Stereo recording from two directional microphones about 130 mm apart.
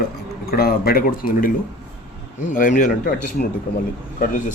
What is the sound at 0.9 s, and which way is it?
Speech, 90° left.